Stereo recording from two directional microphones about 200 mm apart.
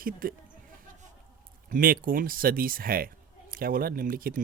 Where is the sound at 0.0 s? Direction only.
45° right (ahead or behind).